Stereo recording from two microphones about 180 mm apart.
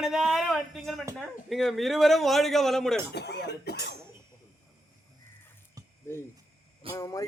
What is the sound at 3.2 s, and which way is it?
Speech, 65° left (ahead or behind).